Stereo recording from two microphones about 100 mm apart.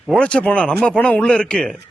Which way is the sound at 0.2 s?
10° left (ahead or behind).